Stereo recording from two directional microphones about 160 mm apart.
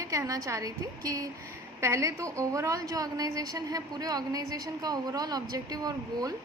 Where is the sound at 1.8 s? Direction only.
20° right (ahead or behind).